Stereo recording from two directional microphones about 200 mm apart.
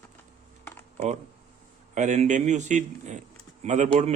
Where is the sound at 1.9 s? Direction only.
35° right (ahead or behind).